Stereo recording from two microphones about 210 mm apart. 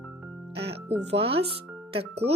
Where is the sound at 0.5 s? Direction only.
55° right (ahead or behind).